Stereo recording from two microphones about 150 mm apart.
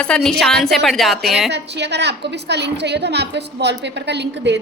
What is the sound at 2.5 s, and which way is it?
Speech, 90° right.